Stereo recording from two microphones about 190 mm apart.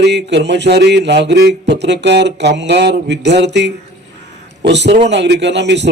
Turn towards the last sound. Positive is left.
turn(degrees=-65)  # may be behind; listen again after turning